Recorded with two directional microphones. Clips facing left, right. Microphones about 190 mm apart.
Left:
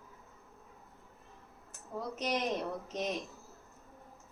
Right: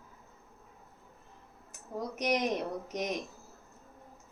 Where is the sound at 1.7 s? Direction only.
15° right (ahead or behind).